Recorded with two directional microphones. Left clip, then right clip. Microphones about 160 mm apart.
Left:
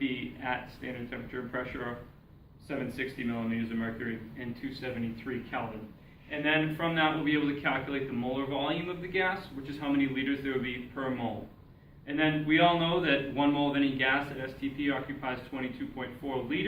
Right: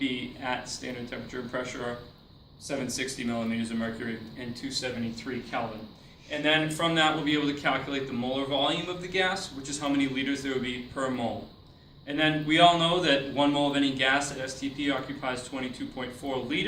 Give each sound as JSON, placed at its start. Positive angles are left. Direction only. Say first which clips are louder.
{"t": 0.0, "sound": "a man's voice", "louder": "right 3 dB", "side_deg": -30}